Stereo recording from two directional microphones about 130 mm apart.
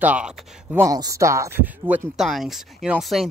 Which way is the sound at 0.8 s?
25° right (ahead or behind).